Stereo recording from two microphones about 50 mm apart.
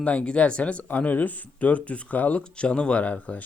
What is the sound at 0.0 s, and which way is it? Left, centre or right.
Speech, left.